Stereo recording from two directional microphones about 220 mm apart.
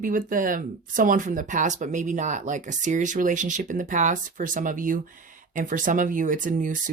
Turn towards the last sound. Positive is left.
turn(degrees=-35)  # may be behind; listen again after turning